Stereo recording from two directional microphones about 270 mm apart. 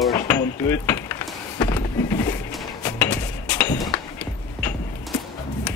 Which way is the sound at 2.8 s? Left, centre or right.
Centre.